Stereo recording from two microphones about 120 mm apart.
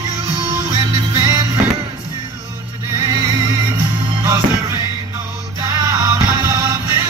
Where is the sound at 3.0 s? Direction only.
35° right (ahead or behind).